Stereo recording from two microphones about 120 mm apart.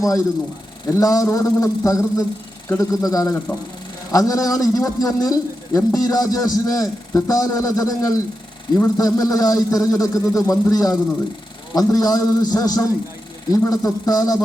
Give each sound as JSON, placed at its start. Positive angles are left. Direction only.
{"t": 0.9, "sound": "a man's voice", "side_deg": 30}